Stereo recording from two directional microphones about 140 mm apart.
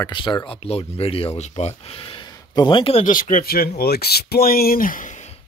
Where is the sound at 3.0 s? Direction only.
75° left (ahead or behind).